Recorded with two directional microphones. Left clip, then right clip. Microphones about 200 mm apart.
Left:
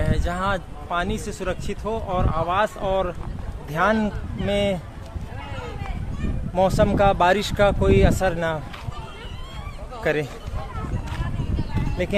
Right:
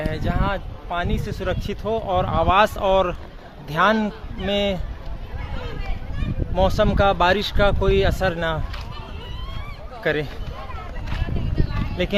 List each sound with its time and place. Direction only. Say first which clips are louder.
0.0 s speech: even; 5° left (ahead or behind)
1.6 s speech: right 3 dB; 25° right (ahead or behind); by 3.2 s 45° right (ahead or behind)
3.7 s a man's voice: right 3 dB; 15° right (ahead or behind)
4.0 s speech: even; centre (ahead or behind)
6.5 s speech: even; 5° left (ahead or behind)
10.0 s speech: even; centre (ahead or behind)
12.0 s a man's voice: right 2 dB; 10° right (ahead or behind)